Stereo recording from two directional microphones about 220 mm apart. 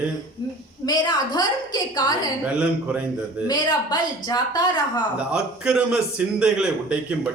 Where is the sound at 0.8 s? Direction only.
20° left (ahead or behind).